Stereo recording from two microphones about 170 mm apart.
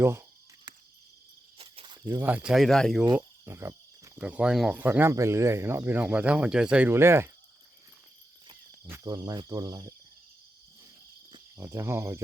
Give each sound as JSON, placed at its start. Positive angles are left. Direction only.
{"t": 0.0, "sound": "speech", "side_deg": -15}
{"t": 1.5, "sound": "cricket", "side_deg": -35}
{"t": 2.0, "sound": "speech", "side_deg": -10}
{"t": 3.1, "sound": "cricket", "side_deg": -20}
{"t": 4.2, "sound": "speech", "side_deg": -5}
{"t": 8.8, "sound": "cricket", "side_deg": -20}
{"t": 11.5, "sound": "speech", "side_deg": -15}